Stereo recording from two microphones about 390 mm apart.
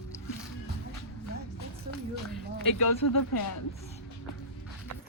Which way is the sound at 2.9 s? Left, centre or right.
Left.